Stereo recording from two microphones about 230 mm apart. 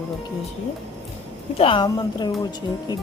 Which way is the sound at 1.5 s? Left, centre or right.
Left.